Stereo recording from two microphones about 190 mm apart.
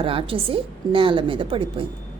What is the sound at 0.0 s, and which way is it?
A woman's voice, 30° right (ahead or behind).